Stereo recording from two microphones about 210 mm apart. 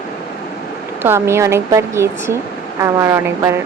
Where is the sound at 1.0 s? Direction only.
10° right (ahead or behind).